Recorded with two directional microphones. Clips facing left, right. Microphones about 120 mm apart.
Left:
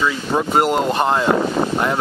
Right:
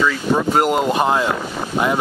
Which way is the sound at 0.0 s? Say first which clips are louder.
Right 2 dB; 15° left (ahead or behind).